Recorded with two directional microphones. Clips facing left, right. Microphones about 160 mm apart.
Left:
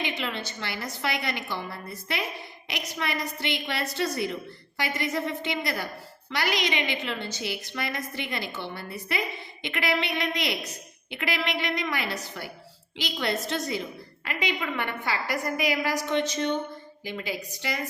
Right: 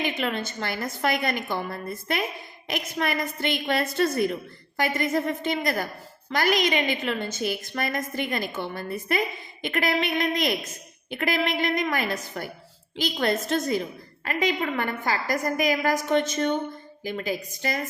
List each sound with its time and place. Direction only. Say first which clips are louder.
0.0 s a woman's voice: right 4 dB; 50° right (ahead or behind)